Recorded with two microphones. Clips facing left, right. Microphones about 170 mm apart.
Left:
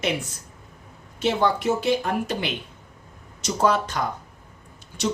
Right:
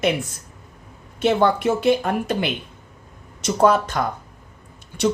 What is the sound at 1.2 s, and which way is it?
A woman's voice, 55° right (ahead or behind).